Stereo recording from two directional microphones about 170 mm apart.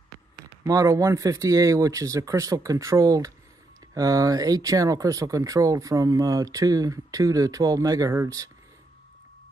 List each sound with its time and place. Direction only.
0.5 s speech: 20° right (ahead or behind)